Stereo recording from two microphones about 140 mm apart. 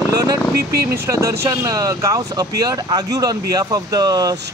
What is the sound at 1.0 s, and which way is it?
Speech, 20° right (ahead or behind).